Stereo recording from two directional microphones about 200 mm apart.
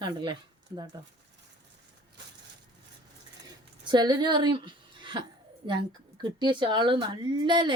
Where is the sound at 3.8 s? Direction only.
20° right (ahead or behind).